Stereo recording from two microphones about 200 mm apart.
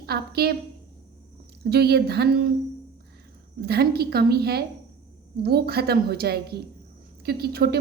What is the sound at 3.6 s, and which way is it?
A woman's voice, 50° right (ahead or behind).